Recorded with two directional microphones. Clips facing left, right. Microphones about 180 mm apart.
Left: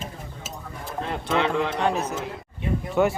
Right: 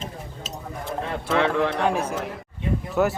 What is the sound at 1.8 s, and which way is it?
Speech, 10° right (ahead or behind).